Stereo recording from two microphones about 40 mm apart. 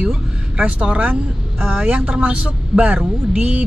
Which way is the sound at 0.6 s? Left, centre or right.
Right.